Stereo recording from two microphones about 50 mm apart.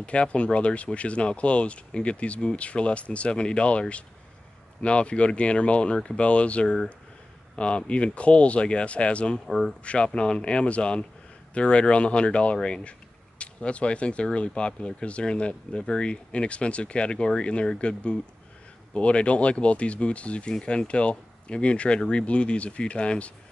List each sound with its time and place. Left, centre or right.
0.0 s speech: left
4.8 s speech: left
9.5 s speech: centre
9.8 s speech: left